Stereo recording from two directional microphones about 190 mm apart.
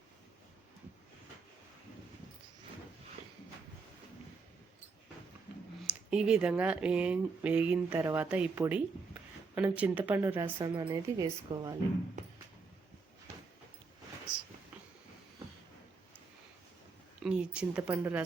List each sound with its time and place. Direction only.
5.8 s speech: 5° right (ahead or behind)
17.2 s speech: 5° right (ahead or behind)